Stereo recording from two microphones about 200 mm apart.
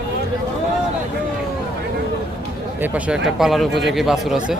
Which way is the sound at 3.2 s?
Centre (ahead or behind).